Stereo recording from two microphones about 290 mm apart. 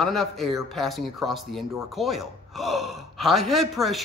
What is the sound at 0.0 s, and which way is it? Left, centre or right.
A man's voice, centre.